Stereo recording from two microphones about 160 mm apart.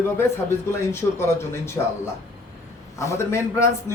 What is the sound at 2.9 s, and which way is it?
Speech, 15° left (ahead or behind).